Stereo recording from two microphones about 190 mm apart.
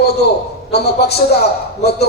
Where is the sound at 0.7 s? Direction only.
60° left (ahead or behind).